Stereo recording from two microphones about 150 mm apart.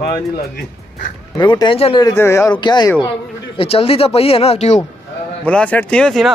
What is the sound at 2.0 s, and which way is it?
Speech, 20° left (ahead or behind).